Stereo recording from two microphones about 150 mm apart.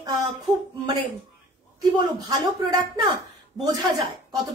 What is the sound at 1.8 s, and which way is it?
A woman's voice, 25° right (ahead or behind).